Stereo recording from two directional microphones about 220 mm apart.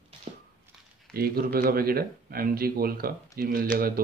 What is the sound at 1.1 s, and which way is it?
Speech, 45° right (ahead or behind).